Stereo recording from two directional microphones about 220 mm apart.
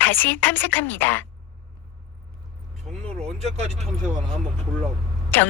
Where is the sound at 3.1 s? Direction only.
30° right (ahead or behind).